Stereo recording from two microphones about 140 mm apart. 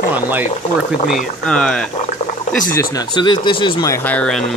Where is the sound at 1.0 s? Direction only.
5° left (ahead or behind).